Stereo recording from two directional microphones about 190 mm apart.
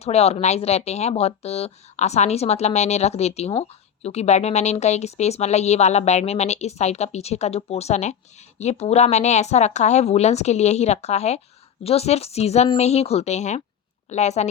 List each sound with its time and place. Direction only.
0.0 s speech: 35° left (ahead or behind)